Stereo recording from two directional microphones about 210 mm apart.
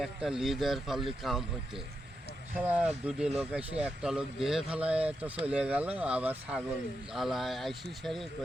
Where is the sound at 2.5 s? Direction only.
5° right (ahead or behind).